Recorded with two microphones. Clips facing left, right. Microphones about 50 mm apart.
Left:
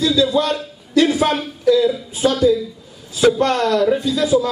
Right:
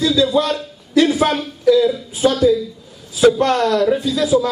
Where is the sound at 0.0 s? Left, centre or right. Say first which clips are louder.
Right 1 dB; centre.